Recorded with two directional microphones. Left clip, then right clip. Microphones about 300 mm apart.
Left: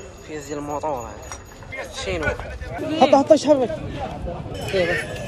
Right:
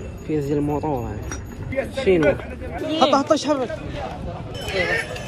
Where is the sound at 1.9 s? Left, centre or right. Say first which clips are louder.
Right 9 dB; centre.